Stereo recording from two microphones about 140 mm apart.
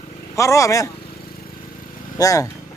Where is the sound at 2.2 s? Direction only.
25° left (ahead or behind).